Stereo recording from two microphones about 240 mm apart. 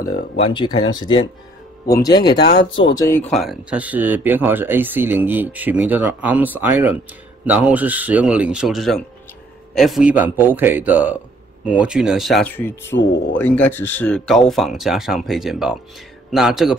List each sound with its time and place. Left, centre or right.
0.4 s speech: centre
2.3 s speech: left
3.0 s speech: centre